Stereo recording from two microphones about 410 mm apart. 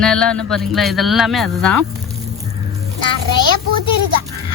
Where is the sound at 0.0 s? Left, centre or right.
Centre.